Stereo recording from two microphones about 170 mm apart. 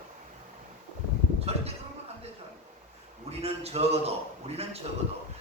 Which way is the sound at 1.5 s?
35° right (ahead or behind).